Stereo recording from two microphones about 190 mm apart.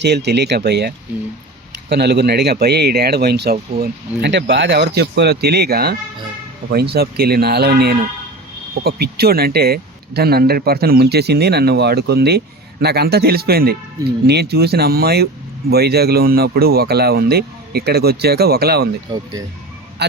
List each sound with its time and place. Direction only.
0.0 s speech: 65° right (ahead or behind)
20.0 s speech: 60° right (ahead or behind)